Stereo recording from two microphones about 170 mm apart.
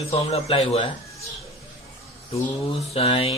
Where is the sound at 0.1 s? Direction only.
35° left (ahead or behind).